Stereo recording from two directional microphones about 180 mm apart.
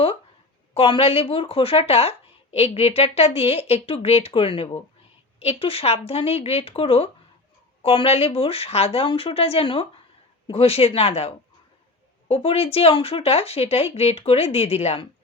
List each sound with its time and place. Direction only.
0.7 s speech: 30° left (ahead or behind)